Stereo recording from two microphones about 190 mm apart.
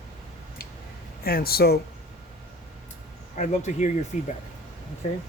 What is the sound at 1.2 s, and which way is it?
Speech, 50° left (ahead or behind).